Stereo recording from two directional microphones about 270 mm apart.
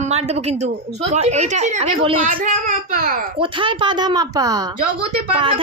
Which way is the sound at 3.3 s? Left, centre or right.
Centre.